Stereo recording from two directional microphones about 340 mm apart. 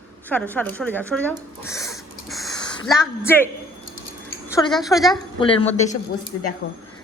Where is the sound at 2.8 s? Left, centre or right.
Centre.